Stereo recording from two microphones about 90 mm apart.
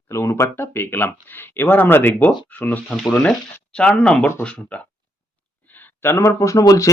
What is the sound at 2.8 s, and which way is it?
Speech, centre (ahead or behind).